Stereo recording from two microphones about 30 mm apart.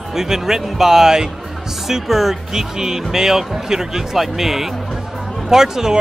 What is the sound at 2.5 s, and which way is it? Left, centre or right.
A man's voice, centre.